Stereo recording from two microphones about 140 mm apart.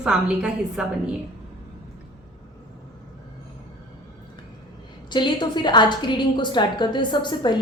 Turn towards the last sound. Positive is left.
turn(degrees=30)  # may be behind; listen again after turning